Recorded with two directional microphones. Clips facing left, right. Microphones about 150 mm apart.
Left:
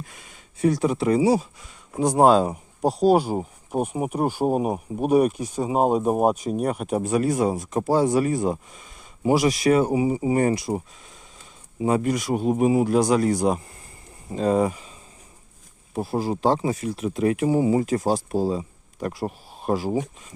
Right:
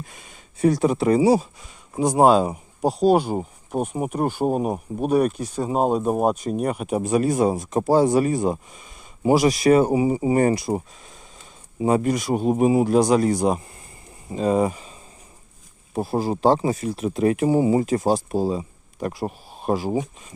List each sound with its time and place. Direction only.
0.1 s a sound: 25° right (ahead or behind)
0.6 s speech: 40° right (ahead or behind)
2.0 s speech: 10° right (ahead or behind)
7.1 s speech: 25° right (ahead or behind)
9.2 s speech: 35° right (ahead or behind)
11.8 s speech: 30° right (ahead or behind); by 14.7 s 10° right (ahead or behind)
14.7 s speech: 35° right (ahead or behind)
16.0 s speech: 40° right (ahead or behind); by 20.0 s 20° right (ahead or behind)